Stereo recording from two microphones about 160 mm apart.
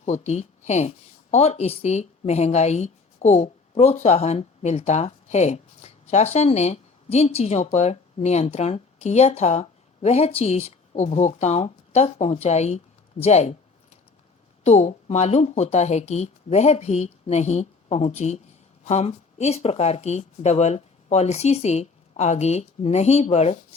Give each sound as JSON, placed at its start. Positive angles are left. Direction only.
{"t": 0.0, "sound": "speech", "side_deg": 45}